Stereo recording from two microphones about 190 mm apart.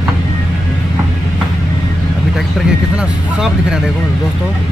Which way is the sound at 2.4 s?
Centre (ahead or behind).